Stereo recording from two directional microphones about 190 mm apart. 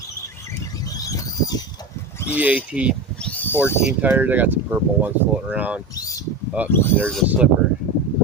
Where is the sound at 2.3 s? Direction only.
10° right (ahead or behind).